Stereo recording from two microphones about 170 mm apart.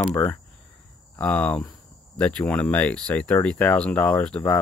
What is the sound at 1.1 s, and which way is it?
Speech, 10° left (ahead or behind).